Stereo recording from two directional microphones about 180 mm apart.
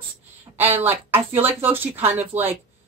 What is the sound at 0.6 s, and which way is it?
Speech, 10° right (ahead or behind).